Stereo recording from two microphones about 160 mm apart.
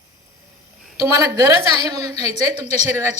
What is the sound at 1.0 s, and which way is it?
Speech, 20° right (ahead or behind).